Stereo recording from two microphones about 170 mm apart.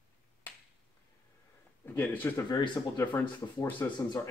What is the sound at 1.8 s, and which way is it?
Speech, 10° left (ahead or behind).